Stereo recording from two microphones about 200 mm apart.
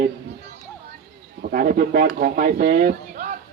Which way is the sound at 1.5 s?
45° right (ahead or behind).